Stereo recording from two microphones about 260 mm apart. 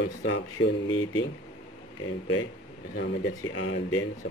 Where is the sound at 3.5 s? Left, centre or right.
Left.